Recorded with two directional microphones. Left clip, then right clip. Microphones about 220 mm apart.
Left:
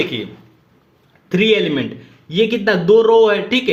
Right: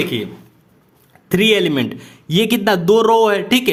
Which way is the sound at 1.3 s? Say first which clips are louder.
Even; 40° right (ahead or behind).